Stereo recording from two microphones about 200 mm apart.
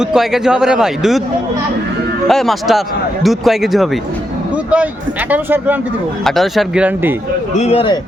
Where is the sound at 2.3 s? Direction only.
Centre (ahead or behind).